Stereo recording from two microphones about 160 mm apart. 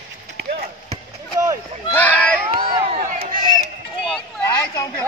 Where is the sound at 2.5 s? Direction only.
35° right (ahead or behind).